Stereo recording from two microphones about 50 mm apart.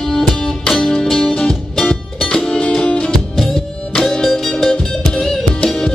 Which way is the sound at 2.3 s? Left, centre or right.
Centre.